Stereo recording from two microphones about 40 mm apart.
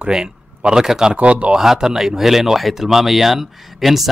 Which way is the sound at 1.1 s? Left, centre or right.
Right.